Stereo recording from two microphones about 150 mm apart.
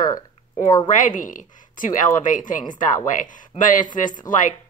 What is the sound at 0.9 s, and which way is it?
A woman's voice, 60° left (ahead or behind).